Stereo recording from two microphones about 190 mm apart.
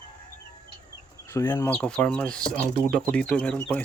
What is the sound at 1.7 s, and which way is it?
Speech, 5° left (ahead or behind).